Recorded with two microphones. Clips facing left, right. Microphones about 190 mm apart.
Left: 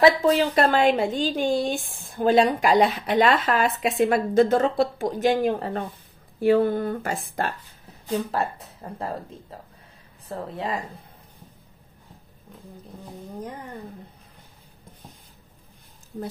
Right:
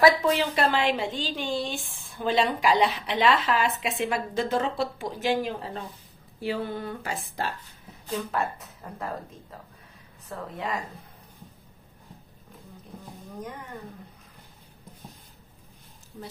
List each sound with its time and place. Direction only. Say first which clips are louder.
0.3 s a woman's voice: left 4 dB; 45° left (ahead or behind)
8.1 s speech: left 4 dB; 35° left (ahead or behind)